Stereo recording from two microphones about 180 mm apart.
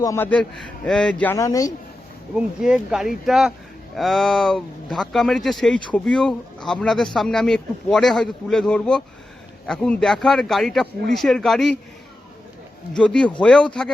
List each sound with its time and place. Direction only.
0.0 s a man's voice: 15° left (ahead or behind)
2.3 s speech: 5° right (ahead or behind)
12.9 s speech: 5° left (ahead or behind)